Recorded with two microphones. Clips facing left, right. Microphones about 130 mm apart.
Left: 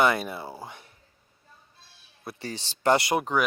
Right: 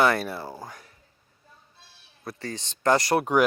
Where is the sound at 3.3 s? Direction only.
15° right (ahead or behind).